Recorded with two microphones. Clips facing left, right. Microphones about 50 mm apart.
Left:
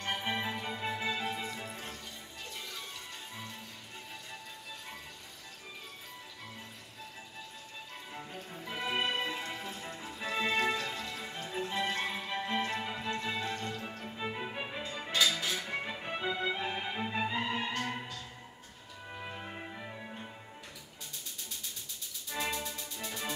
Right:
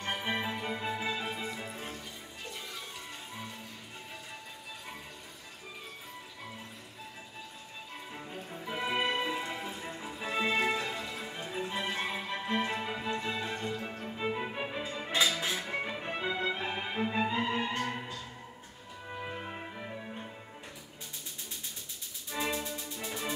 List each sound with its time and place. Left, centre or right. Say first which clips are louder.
0.0 s music: right 1 dB; centre
8.1 s music: right 1 dB; centre
19.0 s music: right 3 dB; centre
22.3 s music: right 2 dB; centre
22.8 s music: right 2 dB; centre